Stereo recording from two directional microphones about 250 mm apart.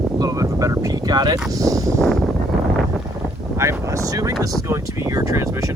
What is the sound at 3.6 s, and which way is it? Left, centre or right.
Speech, centre.